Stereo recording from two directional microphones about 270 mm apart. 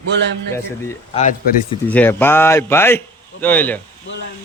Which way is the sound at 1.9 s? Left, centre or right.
Centre.